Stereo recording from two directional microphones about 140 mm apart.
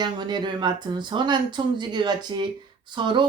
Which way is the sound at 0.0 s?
30° right (ahead or behind).